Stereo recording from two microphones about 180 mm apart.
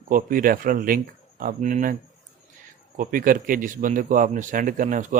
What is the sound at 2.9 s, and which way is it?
A man's voice, 50° right (ahead or behind).